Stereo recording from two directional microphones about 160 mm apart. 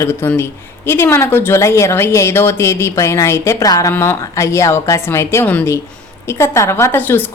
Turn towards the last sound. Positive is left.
turn(degrees=10)  # may be behind; listen again after turning